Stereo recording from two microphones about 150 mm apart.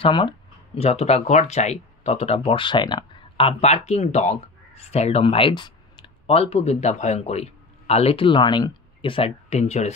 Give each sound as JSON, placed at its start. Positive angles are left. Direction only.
{"t": 0.0, "sound": "speech", "side_deg": 30}
{"t": 0.7, "sound": "speech", "side_deg": 45}